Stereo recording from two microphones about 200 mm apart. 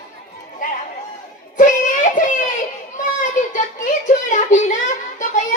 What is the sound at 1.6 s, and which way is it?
Music, 40° left (ahead or behind).